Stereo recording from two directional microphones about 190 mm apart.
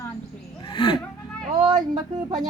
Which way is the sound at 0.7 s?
25° left (ahead or behind).